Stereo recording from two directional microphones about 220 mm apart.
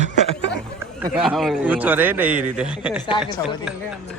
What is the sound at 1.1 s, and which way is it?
A man's voice, centre (ahead or behind).